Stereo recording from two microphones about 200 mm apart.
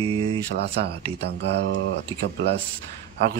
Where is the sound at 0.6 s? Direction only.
55° right (ahead or behind).